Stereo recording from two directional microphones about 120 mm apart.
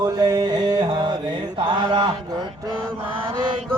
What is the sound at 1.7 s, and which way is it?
Mantra, 40° right (ahead or behind).